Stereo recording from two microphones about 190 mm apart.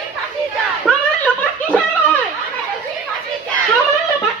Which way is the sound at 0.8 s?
5° left (ahead or behind).